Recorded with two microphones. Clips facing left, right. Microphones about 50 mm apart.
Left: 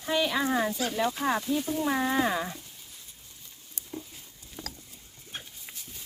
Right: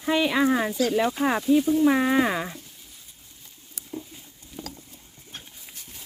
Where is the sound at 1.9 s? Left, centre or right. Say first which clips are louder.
Right 5 dB; right.